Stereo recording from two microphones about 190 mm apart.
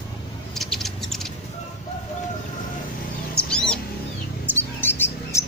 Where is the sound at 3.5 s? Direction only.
5° left (ahead or behind).